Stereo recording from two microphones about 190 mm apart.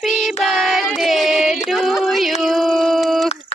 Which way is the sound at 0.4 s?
Centre (ahead or behind).